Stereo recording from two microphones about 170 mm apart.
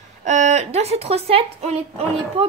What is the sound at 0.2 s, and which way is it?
Speech, 45° right (ahead or behind).